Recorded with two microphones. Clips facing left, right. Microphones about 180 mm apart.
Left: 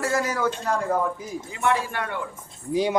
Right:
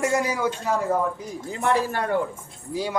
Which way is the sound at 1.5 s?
40° right (ahead or behind).